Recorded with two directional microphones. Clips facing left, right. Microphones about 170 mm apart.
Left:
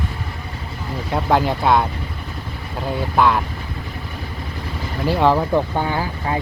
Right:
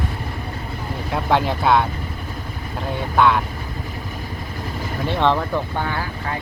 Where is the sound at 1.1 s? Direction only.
Centre (ahead or behind).